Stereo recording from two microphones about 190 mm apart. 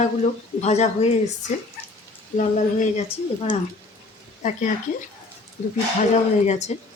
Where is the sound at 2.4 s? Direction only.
40° left (ahead or behind).